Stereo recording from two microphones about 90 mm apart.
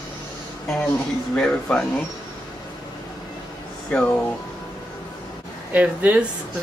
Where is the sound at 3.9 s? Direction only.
15° left (ahead or behind).